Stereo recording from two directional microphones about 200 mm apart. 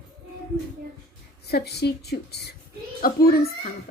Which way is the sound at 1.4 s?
55° left (ahead or behind).